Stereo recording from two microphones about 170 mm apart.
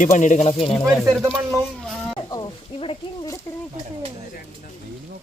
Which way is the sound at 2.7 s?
30° left (ahead or behind).